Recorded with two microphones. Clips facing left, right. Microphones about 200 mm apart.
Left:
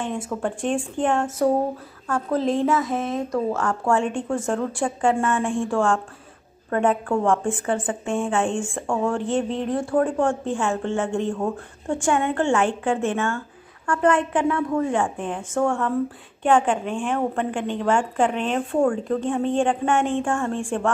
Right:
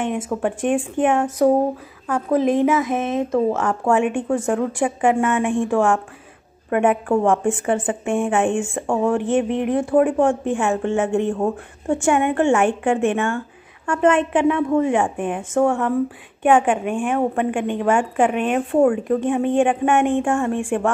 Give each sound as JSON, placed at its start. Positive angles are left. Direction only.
{"t": 0.0, "sound": "speech", "side_deg": -20}